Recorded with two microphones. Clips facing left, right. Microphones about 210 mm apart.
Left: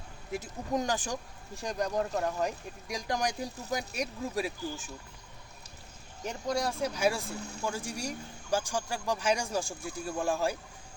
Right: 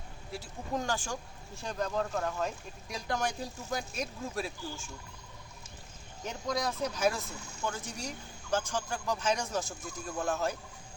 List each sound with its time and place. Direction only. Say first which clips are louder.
0.3 s speech: left 4 dB; 20° left (ahead or behind)
6.2 s speech: left 2 dB; 10° left (ahead or behind)